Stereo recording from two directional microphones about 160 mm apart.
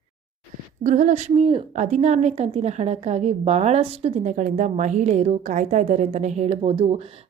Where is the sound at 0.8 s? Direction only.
50° right (ahead or behind).